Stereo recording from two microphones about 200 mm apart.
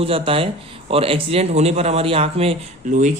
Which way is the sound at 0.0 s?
30° right (ahead or behind).